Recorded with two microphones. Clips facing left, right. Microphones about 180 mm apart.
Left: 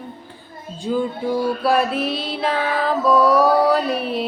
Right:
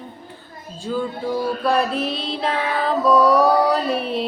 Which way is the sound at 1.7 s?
Centre (ahead or behind).